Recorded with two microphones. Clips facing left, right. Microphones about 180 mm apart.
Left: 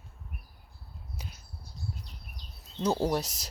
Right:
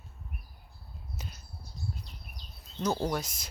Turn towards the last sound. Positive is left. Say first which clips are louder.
# left 3 dB
turn(degrees=35)  # may be behind; listen again after turning